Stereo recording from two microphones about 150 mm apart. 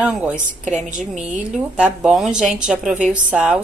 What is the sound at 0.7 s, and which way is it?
Speech, 55° right (ahead or behind).